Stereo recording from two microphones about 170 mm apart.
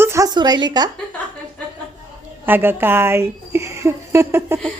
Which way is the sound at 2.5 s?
10° right (ahead or behind).